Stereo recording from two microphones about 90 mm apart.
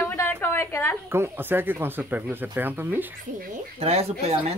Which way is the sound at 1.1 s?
25° right (ahead or behind).